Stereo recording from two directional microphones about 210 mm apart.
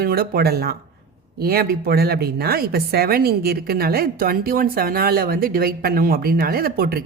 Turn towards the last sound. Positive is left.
turn(degrees=-45)  # may be behind; listen again after turning